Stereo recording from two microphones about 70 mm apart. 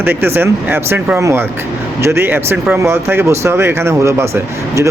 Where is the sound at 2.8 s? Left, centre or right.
Right.